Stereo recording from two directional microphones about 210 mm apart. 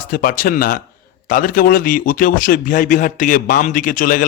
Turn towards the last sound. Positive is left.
turn(degrees=40)  # may be behind; listen again after turning